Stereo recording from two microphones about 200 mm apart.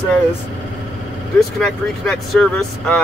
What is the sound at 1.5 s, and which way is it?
Speech, centre (ahead or behind).